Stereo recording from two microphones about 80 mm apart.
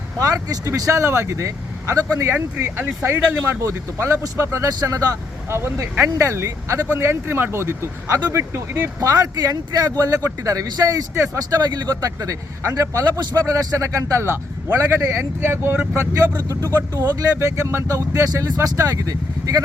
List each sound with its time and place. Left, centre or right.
0.2 s speech: right
5.5 s speech: right
9.0 s speech: right
16.9 s speech: right
18.2 s speech: right